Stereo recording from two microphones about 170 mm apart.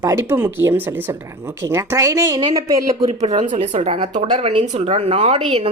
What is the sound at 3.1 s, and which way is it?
A woman's voice, 40° right (ahead or behind).